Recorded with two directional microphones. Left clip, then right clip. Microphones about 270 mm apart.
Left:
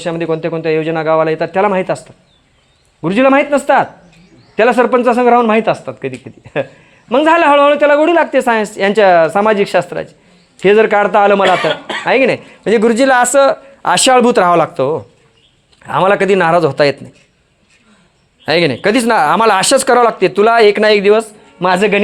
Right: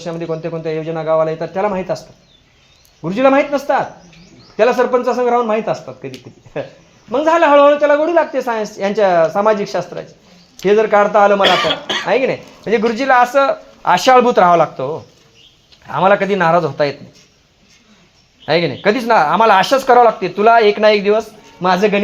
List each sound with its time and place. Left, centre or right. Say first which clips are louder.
0.0 s speech: left 6 dB; left
3.0 s speech: left 2 dB; left
11.7 s speech: even; centre
12.0 s speech: left 5 dB; left
18.4 s speech: left 2 dB; left